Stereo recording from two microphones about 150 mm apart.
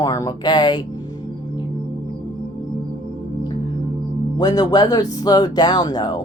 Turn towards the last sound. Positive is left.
turn(degrees=30)  # may be behind; listen again after turning